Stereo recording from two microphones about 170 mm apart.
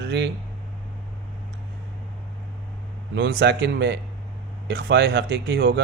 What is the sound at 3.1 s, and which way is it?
Speech, 80° right.